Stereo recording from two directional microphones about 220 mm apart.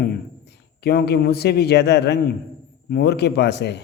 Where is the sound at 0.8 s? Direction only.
45° left (ahead or behind).